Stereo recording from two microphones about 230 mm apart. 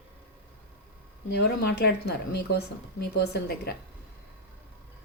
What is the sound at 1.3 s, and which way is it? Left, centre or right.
Speech, left.